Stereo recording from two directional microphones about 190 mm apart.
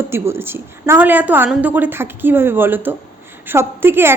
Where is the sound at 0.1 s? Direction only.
10° right (ahead or behind).